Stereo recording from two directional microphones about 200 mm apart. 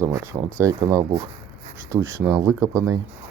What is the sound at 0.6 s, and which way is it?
Speech, 15° right (ahead or behind).